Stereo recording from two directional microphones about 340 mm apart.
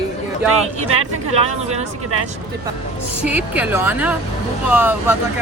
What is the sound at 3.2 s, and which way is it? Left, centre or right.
A woman's voice, centre.